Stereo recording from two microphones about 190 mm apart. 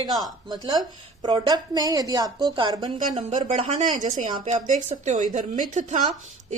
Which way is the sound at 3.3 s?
35° right (ahead or behind).